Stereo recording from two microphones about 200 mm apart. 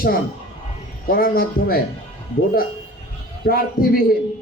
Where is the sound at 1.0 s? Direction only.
45° left (ahead or behind).